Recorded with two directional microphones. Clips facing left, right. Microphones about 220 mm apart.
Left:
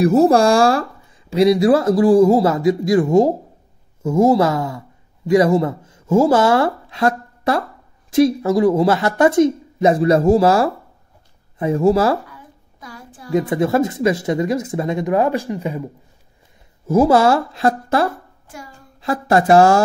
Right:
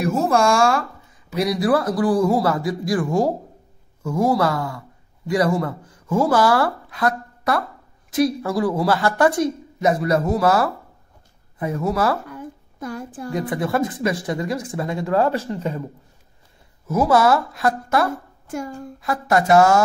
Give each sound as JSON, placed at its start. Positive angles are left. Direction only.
{"t": 0.0, "sound": "a woman's voice", "side_deg": 35}
{"t": 12.3, "sound": "child singing", "side_deg": -50}
{"t": 13.3, "sound": "a woman's voice", "side_deg": 25}
{"t": 16.8, "sound": "a woman's voice", "side_deg": 30}
{"t": 18.5, "sound": "speech", "side_deg": -50}
{"t": 18.9, "sound": "speech", "side_deg": 30}